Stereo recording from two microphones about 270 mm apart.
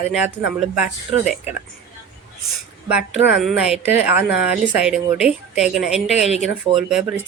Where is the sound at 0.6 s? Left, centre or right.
Centre.